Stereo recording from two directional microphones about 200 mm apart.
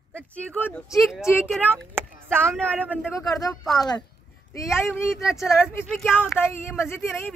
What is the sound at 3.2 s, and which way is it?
Speech, 15° left (ahead or behind).